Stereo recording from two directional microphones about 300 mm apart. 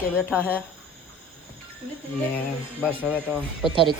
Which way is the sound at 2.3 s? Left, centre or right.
Centre.